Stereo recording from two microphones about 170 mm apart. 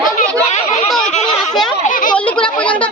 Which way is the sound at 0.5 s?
45° left (ahead or behind).